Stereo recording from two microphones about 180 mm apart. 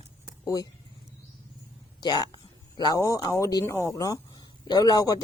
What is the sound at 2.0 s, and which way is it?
A man's voice, 20° left (ahead or behind).